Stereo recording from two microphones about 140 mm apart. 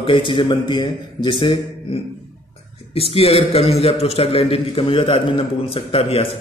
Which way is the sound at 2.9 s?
45° left (ahead or behind).